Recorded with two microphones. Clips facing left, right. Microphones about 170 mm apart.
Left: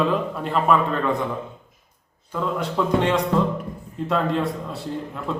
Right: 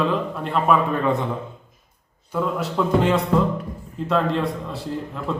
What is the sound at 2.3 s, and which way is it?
A man's voice, 5° right (ahead or behind).